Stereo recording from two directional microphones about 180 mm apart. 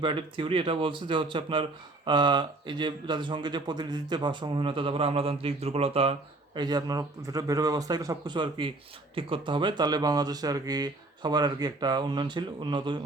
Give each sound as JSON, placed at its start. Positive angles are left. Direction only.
{"t": 0.0, "sound": "speech", "side_deg": -30}